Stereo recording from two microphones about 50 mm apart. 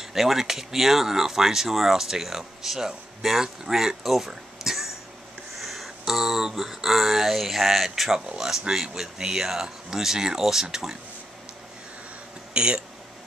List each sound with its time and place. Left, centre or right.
0.0 s speech: centre
12.5 s speech: centre